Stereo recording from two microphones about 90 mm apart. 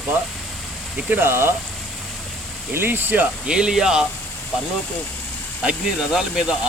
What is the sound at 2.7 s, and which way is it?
Speech, 25° right (ahead or behind).